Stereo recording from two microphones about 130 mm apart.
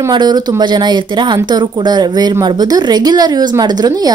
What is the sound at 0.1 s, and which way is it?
A woman's voice, 35° right (ahead or behind).